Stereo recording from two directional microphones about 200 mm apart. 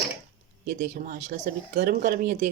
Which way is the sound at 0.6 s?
40° right (ahead or behind).